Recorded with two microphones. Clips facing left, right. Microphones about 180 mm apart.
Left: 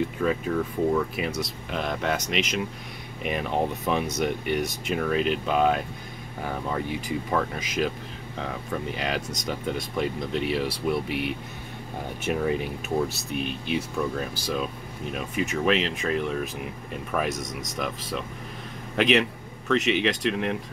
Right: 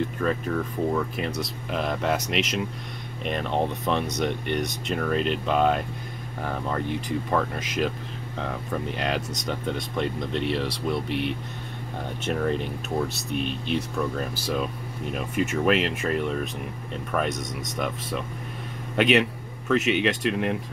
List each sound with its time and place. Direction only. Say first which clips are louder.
0.2 s speech: left 2 dB; 5° left (ahead or behind)